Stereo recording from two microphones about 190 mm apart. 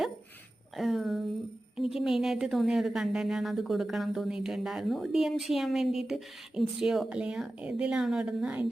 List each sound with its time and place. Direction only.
0.8 s a woman's voice: centre (ahead or behind)